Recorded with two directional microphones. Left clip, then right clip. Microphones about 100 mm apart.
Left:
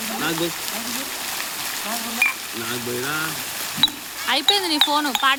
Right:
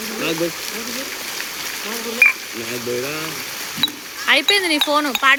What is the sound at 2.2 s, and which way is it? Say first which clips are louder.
Speech: right 7 dB; 10° right (ahead or behind).